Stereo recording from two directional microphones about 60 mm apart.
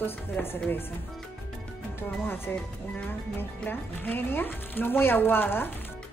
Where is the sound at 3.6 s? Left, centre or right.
Left.